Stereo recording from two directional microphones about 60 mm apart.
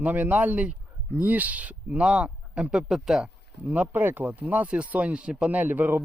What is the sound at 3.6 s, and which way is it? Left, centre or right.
Speech, right.